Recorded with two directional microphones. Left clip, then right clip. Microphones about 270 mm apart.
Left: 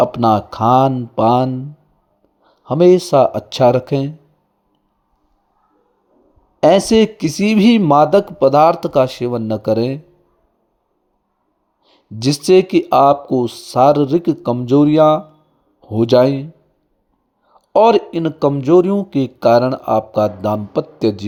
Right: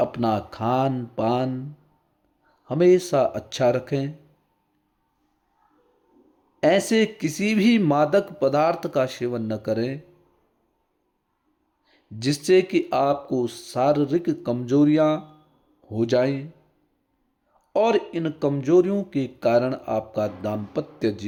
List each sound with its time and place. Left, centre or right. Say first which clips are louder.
0.0 s speech: left 10 dB; left
2.6 s speech: left 7 dB; centre
6.6 s speech: left 9 dB; centre
11.9 s speech: left 8 dB; centre
17.7 s speech: left 10 dB; left